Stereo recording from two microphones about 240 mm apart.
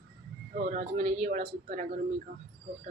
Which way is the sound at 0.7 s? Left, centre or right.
Right.